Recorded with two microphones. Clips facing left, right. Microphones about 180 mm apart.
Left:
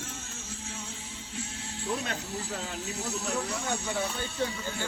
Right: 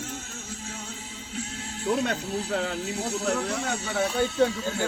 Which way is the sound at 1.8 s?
65° right (ahead or behind).